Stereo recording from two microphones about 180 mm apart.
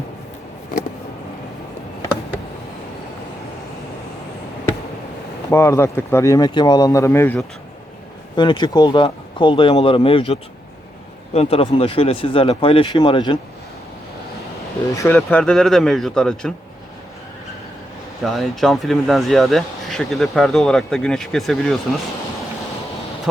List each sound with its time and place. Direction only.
5.5 s speech: 15° left (ahead or behind)
8.4 s speech: 25° left (ahead or behind)
11.3 s speech: 30° left (ahead or behind)
14.8 s speech: 15° left (ahead or behind)
18.2 s speech: centre (ahead or behind)